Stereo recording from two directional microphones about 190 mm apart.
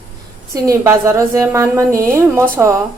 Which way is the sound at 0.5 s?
15° right (ahead or behind).